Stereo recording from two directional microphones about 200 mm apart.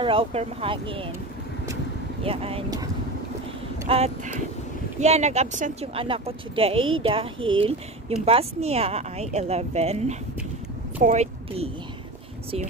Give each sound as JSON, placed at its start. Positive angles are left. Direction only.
{"t": 0.0, "sound": "a woman's voice", "side_deg": -25}
{"t": 2.2, "sound": "a woman's voice", "side_deg": -30}
{"t": 3.9, "sound": "a woman's voice", "side_deg": -30}